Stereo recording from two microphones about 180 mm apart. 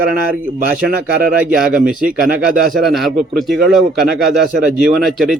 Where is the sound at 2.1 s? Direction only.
50° right (ahead or behind).